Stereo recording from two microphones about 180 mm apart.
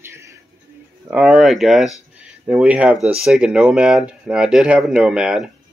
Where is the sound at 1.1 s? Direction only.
5° right (ahead or behind).